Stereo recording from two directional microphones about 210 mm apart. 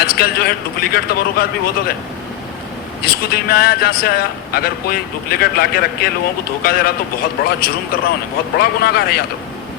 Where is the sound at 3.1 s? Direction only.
45° left (ahead or behind).